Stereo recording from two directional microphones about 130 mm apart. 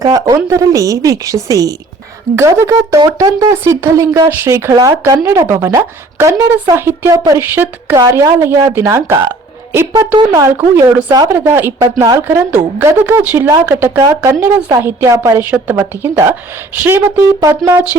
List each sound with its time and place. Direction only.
0.0 s speech: 25° right (ahead or behind)
7.9 s speech: 25° right (ahead or behind)
11.1 s speech: 30° right (ahead or behind)
11.3 s a woman's voice: 15° right (ahead or behind)